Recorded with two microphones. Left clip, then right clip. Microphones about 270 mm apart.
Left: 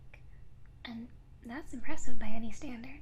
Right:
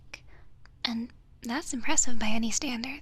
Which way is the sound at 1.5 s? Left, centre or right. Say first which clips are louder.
Right 11 dB; right.